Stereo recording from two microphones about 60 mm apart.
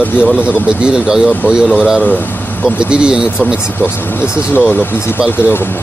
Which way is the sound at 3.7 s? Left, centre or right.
Left.